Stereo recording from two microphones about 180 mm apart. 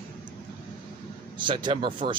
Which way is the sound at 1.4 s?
25° right (ahead or behind).